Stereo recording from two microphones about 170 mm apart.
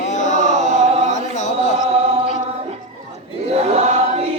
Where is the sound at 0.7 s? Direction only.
40° right (ahead or behind).